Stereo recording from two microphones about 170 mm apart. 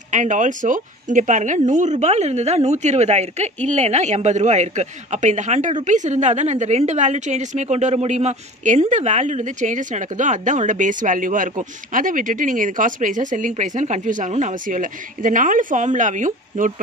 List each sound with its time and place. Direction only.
0.1 s speech: 45° right (ahead or behind)